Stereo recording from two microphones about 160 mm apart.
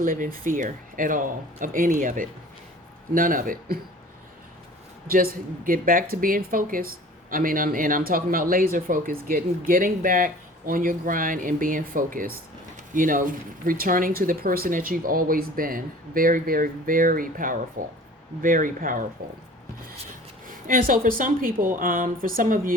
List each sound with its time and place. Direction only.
0.0 s speech: 60° right (ahead or behind)
5.0 s speech: 65° right (ahead or behind)
20.7 s speech: 60° right (ahead or behind)